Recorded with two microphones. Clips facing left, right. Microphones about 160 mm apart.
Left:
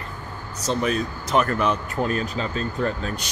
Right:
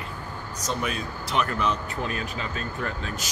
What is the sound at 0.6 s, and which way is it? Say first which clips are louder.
Speech: left 7 dB; 40° left (ahead or behind).